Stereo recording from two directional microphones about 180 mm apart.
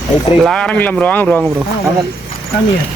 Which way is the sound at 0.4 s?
5° left (ahead or behind).